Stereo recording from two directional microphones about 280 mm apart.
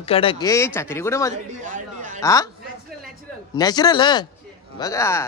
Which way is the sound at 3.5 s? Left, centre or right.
Centre.